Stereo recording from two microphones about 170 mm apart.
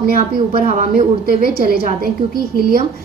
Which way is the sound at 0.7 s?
45° right (ahead or behind).